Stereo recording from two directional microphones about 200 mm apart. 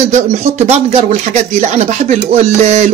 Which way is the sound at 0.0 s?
35° right (ahead or behind).